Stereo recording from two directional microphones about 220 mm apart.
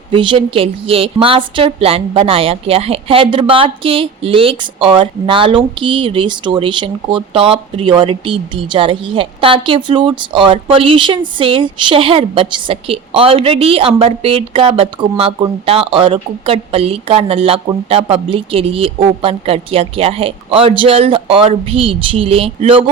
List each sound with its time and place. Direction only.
0.1 s a woman's voice: 20° right (ahead or behind)